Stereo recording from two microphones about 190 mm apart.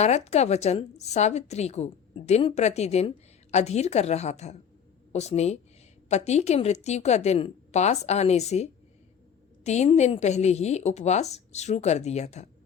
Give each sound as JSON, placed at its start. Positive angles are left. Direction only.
{"t": 0.0, "sound": "a woman's voice", "side_deg": 35}